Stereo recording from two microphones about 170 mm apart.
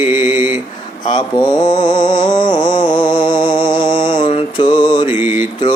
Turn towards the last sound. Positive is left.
turn(degrees=-10)  # may be behind; listen again after turning